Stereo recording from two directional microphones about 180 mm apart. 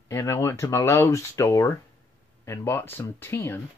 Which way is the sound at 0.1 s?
15° left (ahead or behind).